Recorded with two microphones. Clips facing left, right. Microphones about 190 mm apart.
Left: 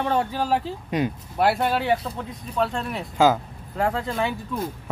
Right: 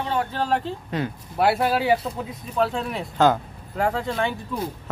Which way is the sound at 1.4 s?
Centre (ahead or behind).